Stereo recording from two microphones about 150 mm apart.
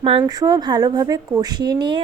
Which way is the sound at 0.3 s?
25° right (ahead or behind).